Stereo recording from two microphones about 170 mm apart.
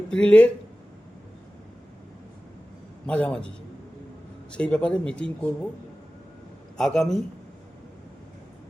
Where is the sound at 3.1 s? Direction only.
5° left (ahead or behind).